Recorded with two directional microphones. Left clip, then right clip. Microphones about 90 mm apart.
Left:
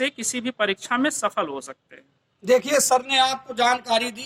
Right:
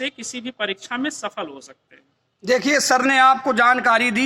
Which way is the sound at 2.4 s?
35° right (ahead or behind).